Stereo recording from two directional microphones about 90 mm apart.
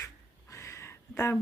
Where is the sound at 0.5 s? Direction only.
35° left (ahead or behind).